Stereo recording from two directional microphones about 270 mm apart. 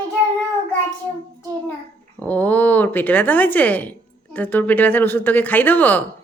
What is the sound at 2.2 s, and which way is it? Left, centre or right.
Speech, centre.